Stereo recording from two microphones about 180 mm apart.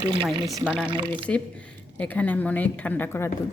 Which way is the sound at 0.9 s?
25° right (ahead or behind).